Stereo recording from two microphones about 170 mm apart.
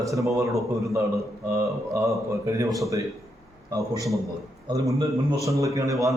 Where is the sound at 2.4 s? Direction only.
20° right (ahead or behind).